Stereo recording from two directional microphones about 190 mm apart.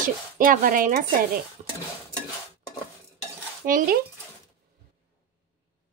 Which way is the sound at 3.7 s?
45° right (ahead or behind).